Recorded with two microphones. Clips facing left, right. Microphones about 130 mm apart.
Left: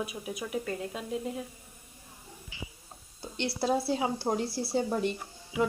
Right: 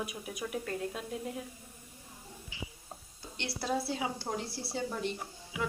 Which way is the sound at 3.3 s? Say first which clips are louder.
Left 5 dB; 30° left (ahead or behind).